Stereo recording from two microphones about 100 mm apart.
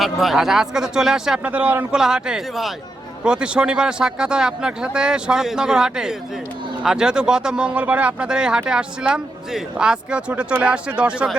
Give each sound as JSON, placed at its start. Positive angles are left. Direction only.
{"t": 0.0, "sound": "speech", "side_deg": 0}
{"t": 1.5, "sound": "speech", "side_deg": -15}
{"t": 1.9, "sound": "speech", "side_deg": -5}